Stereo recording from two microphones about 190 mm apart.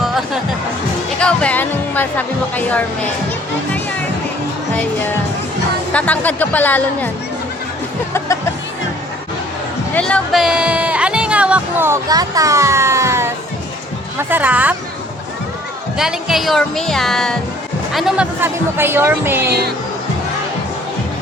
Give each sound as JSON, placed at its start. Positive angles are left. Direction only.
{"t": 1.2, "sound": "speech", "side_deg": 5}
{"t": 4.7, "sound": "music", "side_deg": 10}
{"t": 5.9, "sound": "speech", "side_deg": 5}
{"t": 9.9, "sound": "speech", "side_deg": 5}
{"t": 16.0, "sound": "speech", "side_deg": 0}